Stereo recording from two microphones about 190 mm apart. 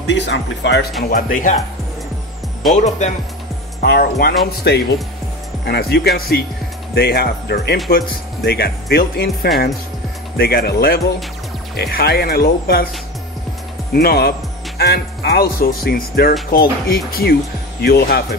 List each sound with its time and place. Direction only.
0.0 s speech: 65° left (ahead or behind)
1.1 s speech: 45° left (ahead or behind)
2.7 s speech: 35° left (ahead or behind)
3.8 s speech: 50° left (ahead or behind)
13.9 s speech: 55° left (ahead or behind)